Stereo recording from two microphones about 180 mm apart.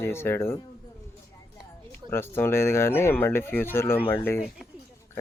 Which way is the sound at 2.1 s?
10° left (ahead or behind).